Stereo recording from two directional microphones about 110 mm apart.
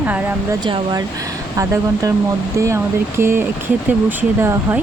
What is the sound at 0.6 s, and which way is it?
Speech, 40° right (ahead or behind).